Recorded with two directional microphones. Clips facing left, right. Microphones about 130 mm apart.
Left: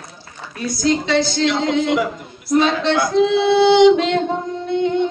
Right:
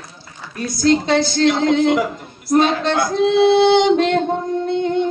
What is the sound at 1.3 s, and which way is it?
A man's voice, 50° right (ahead or behind).